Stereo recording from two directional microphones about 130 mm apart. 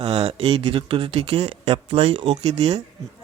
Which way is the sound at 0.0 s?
50° right (ahead or behind).